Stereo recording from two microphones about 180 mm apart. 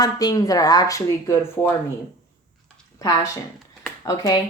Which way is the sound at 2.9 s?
20° left (ahead or behind).